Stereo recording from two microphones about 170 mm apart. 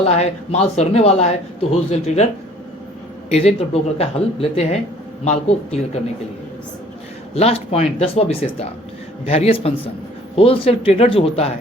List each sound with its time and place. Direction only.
0.0 s speech: 35° left (ahead or behind)
3.2 s speech: 35° left (ahead or behind)
7.3 s speech: 35° left (ahead or behind)